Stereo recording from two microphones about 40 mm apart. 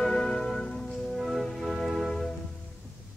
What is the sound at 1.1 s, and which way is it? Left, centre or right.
Music, centre.